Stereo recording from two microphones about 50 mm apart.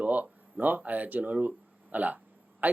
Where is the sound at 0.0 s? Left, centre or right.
Right.